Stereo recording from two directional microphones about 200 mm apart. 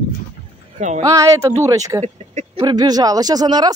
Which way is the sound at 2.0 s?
35° right (ahead or behind).